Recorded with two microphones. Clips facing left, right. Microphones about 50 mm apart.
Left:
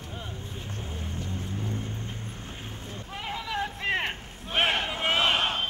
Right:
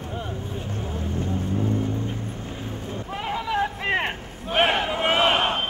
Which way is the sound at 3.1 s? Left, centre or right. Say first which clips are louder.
Right 7 dB; centre.